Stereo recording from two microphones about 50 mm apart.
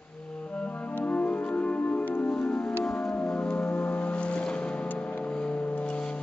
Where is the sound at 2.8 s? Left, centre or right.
Centre.